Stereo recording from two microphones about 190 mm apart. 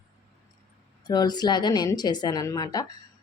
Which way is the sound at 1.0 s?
20° left (ahead or behind).